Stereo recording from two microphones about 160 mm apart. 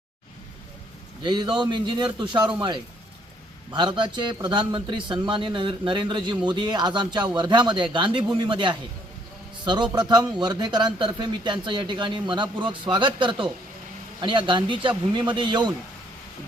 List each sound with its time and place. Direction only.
1.2 s a man's voice: 30° right (ahead or behind)